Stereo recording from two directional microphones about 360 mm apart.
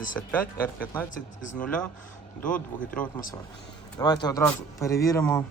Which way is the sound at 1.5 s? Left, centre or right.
Centre.